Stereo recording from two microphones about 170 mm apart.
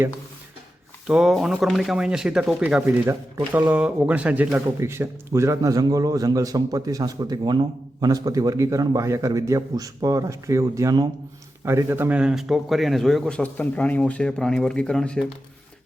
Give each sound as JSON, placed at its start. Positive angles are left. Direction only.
{"t": 1.0, "sound": "a man's voice", "side_deg": -5}